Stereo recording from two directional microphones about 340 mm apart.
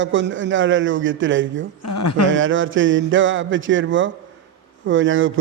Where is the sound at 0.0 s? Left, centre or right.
Right.